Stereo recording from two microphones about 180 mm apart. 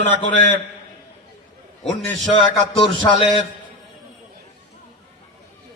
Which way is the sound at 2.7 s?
30° left (ahead or behind).